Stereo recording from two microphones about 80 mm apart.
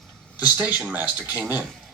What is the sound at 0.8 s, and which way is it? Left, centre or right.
Speech, centre.